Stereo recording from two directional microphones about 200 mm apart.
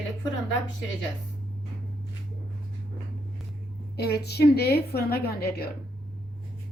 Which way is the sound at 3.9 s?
55° left (ahead or behind).